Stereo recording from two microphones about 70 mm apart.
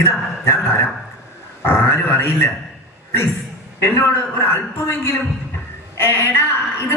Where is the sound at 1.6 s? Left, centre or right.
Left.